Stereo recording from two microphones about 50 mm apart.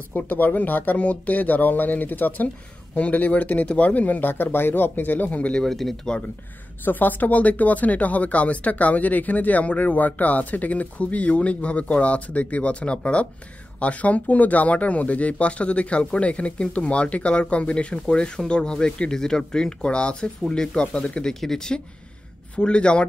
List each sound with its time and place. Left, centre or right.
0.1 s speech: left
5.7 s speech: centre
6.8 s speech: left